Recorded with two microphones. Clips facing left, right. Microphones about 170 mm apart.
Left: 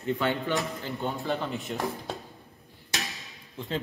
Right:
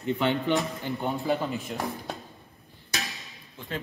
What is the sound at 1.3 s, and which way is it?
Speech, centre (ahead or behind).